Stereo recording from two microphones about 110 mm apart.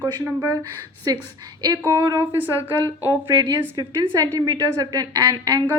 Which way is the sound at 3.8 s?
40° right (ahead or behind).